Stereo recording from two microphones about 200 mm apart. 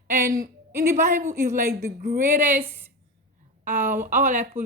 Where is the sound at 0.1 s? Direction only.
45° right (ahead or behind).